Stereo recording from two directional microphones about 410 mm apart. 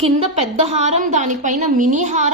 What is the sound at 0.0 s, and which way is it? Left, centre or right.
A woman's voice, centre.